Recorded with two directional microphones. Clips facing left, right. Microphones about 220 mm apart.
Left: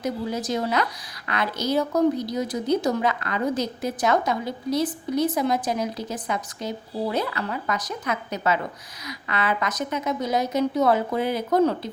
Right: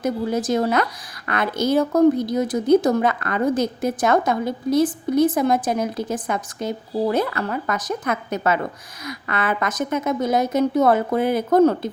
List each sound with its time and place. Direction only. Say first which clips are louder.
0.0 s a woman's voice: right 5 dB; 50° right (ahead or behind)